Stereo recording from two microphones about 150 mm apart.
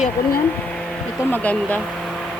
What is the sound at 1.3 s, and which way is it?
Speech, 10° left (ahead or behind).